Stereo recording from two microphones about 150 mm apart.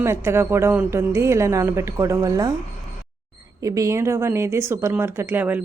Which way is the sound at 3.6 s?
20° right (ahead or behind).